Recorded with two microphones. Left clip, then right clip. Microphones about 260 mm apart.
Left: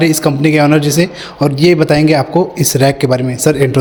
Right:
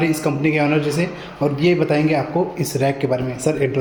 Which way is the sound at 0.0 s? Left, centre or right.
Left.